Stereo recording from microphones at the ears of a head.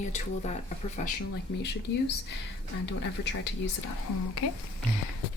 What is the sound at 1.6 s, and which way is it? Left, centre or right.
Speech, left.